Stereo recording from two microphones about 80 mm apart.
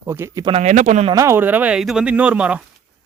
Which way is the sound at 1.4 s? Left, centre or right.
Right.